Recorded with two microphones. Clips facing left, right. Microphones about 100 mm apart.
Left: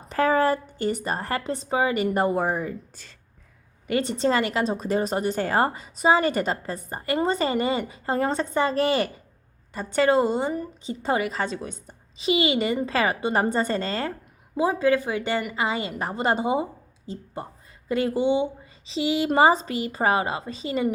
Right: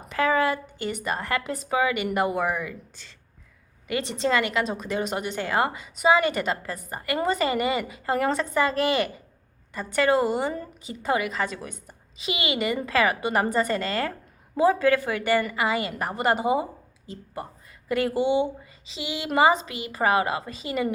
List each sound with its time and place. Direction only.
0.1 s a woman's voice: 40° left (ahead or behind); by 10.7 s 20° left (ahead or behind)
10.8 s a woman's voice: 30° left (ahead or behind)
14.5 s a woman's voice: 20° left (ahead or behind)
17.8 s a woman's voice: 25° left (ahead or behind)
18.6 s a woman's voice: 35° left (ahead or behind)